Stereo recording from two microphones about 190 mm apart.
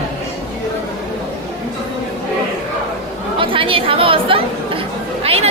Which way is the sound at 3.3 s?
30° right (ahead or behind).